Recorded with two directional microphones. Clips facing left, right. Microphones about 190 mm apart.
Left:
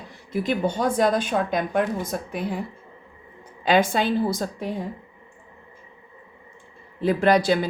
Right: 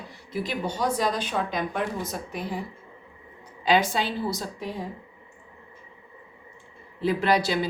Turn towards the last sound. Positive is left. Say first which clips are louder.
# left 4 dB
turn(degrees=50)  # may be behind; listen again after turning